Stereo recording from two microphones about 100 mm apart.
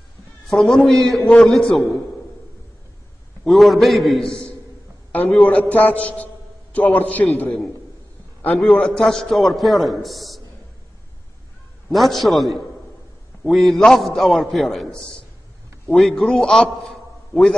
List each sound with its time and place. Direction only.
0.5 s a man's voice: centre (ahead or behind)
3.4 s a man's voice: centre (ahead or behind)
5.5 s a man's voice: 15° left (ahead or behind)
8.5 s a man's voice: 5° left (ahead or behind)
11.9 s a man's voice: centre (ahead or behind)